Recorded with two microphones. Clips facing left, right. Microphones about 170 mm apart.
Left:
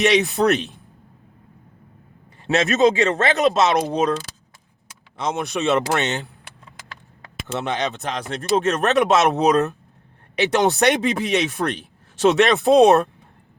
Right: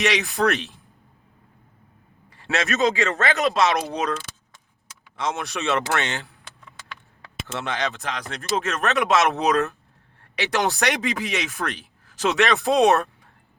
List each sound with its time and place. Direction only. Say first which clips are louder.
0.0 s speech: left 5 dB; 25° left (ahead or behind)
2.4 s speech: left 5 dB; 20° left (ahead or behind)
4.0 s speech: left 6 dB; 35° left (ahead or behind)
5.1 s speech: left 3 dB; 20° left (ahead or behind)
7.4 s speech: left 3 dB; 20° left (ahead or behind); by 9.0 s 35° left (ahead or behind)
9.1 s speech: left 3 dB; 20° left (ahead or behind)